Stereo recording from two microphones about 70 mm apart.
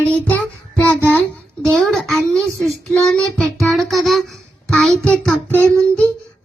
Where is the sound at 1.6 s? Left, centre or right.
Centre.